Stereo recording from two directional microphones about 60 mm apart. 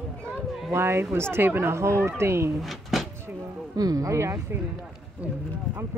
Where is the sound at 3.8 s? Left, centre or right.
Right.